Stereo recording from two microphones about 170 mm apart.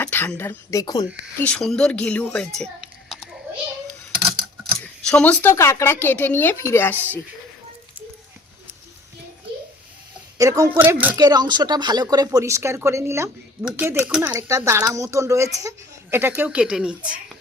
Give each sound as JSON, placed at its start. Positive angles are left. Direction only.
{"t": 0.0, "sound": "speech", "side_deg": 10}
{"t": 1.4, "sound": "speech", "side_deg": 5}
{"t": 5.0, "sound": "speech", "side_deg": 5}
{"t": 10.3, "sound": "speech", "side_deg": -20}
{"t": 11.2, "sound": "speech", "side_deg": -25}